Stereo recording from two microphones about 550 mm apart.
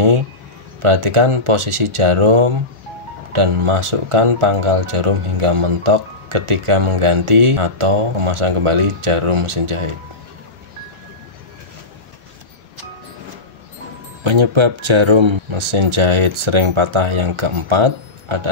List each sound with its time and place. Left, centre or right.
0.8 s speech: right
14.2 s speech: right